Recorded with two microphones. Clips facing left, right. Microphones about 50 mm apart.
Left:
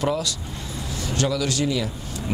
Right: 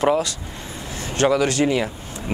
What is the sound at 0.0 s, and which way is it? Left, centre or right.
Speech, right.